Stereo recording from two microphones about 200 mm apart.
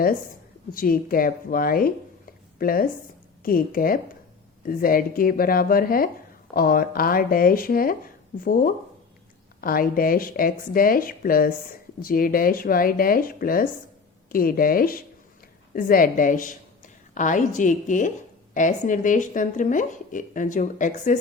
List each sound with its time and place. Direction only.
0.7 s a woman's voice: 45° left (ahead or behind)